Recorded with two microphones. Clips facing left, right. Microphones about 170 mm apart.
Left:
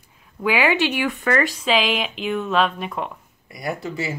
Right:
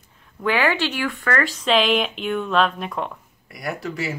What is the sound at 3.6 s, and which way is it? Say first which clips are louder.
Speech: left 1 dB; 25° left (ahead or behind).